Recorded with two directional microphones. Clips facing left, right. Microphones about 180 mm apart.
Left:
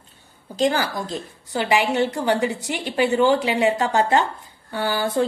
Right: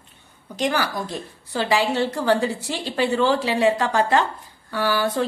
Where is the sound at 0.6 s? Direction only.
25° left (ahead or behind).